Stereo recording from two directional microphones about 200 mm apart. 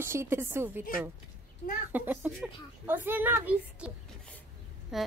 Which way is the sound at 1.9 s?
10° right (ahead or behind).